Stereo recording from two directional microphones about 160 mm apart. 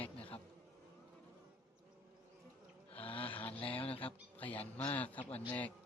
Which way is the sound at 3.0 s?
35° left (ahead or behind).